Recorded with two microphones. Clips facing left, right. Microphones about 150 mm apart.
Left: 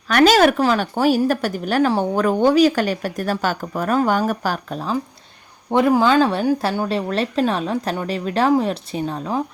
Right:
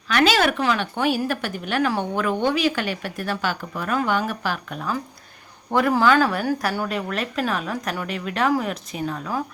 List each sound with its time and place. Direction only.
0.1 s speech: 45° left (ahead or behind)
5.7 s speech: 20° left (ahead or behind)